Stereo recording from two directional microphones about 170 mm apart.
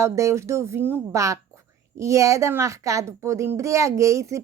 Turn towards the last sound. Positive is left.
turn(degrees=-15)  # may be behind; listen again after turning